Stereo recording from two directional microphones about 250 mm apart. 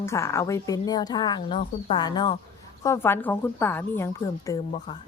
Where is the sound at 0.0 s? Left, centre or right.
Centre.